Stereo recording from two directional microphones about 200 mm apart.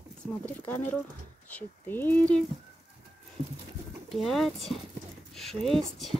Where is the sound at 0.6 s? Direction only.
10° left (ahead or behind).